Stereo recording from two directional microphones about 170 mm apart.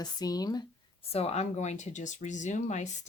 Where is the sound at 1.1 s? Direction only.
35° left (ahead or behind).